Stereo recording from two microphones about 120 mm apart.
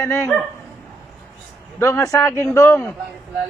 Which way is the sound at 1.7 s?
25° left (ahead or behind).